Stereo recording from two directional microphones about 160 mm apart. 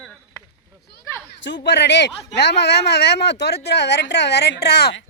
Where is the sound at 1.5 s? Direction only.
90° left.